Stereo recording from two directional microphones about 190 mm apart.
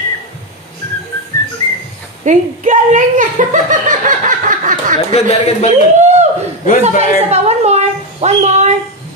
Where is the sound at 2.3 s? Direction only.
40° right (ahead or behind).